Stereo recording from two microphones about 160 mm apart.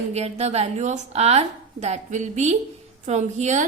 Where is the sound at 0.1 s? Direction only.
40° right (ahead or behind).